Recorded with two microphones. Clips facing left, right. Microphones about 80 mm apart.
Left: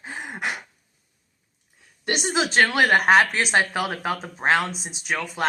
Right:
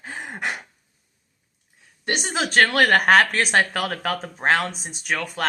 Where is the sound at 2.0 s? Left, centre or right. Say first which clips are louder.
Even; right.